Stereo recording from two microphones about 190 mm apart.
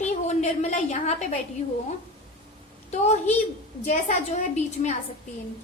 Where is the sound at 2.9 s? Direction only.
35° left (ahead or behind).